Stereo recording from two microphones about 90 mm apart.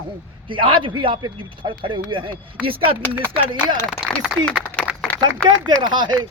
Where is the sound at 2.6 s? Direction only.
90° right.